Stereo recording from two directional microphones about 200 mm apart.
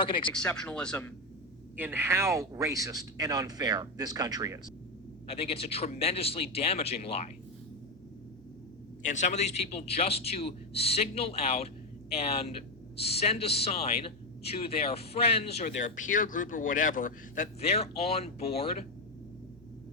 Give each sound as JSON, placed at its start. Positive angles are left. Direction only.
{"t": 0.0, "sound": "speech", "side_deg": 25}
{"t": 0.3, "sound": "speech", "side_deg": 5}
{"t": 1.7, "sound": "speech", "side_deg": -10}
{"t": 5.3, "sound": "speech", "side_deg": 30}
{"t": 9.0, "sound": "a man's voice", "side_deg": 35}